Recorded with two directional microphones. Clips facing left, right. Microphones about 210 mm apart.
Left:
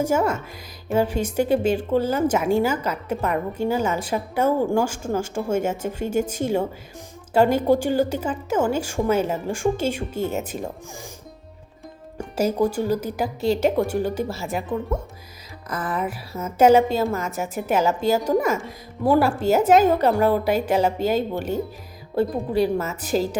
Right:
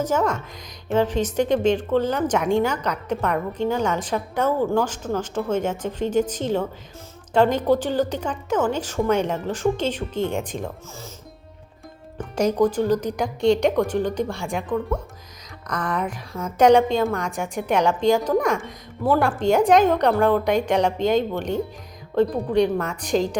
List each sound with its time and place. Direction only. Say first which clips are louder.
0.0 s a woman's voice: left 1 dB; 10° left (ahead or behind)
12.1 s a woman's voice: right 1 dB; 10° left (ahead or behind)